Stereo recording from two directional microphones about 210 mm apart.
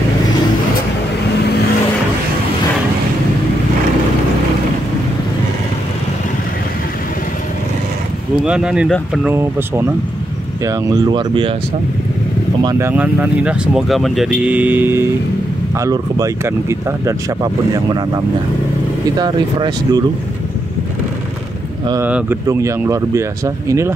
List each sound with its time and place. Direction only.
8.5 s speech: 5° right (ahead or behind)
9.3 s speech: 10° right (ahead or behind)
12.6 s speech: 10° right (ahead or behind)
21.8 s speech: 15° right (ahead or behind)